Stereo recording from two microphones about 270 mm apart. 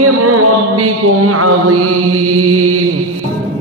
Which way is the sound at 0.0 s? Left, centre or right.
Right.